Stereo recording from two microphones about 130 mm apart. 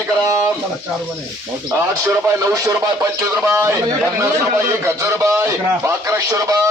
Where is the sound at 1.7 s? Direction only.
20° right (ahead or behind).